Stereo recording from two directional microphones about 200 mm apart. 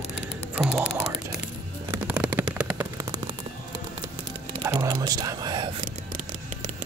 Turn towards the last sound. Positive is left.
turn(degrees=-20)  # may be behind; listen again after turning